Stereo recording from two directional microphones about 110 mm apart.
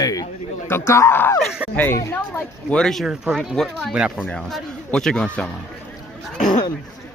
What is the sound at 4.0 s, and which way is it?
Speech, 10° right (ahead or behind).